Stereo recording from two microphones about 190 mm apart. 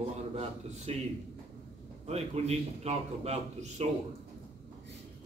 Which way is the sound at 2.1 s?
35° right (ahead or behind).